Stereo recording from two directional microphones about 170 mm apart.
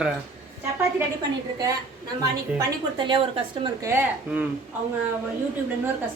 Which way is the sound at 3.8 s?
15° right (ahead or behind).